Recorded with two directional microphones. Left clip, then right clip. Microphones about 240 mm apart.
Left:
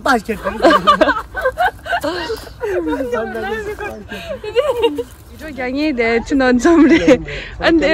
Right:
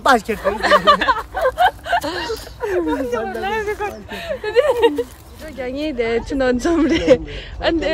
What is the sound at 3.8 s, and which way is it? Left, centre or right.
Speech, right.